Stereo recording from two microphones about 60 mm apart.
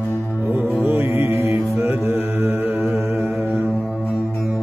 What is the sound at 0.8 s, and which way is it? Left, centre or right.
Music, right.